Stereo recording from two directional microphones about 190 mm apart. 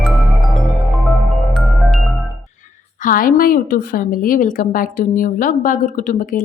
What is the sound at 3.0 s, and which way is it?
A woman's voice, 45° left (ahead or behind).